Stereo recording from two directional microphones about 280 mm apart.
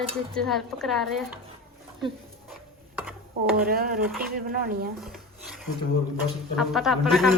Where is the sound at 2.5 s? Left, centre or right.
Centre.